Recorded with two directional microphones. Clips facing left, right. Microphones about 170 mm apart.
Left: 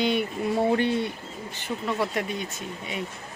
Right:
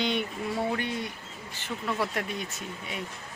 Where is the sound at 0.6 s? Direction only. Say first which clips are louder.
Left 8 dB; 30° left (ahead or behind).